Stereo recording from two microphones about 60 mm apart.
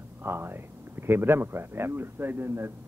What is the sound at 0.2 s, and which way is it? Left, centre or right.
Speech, right.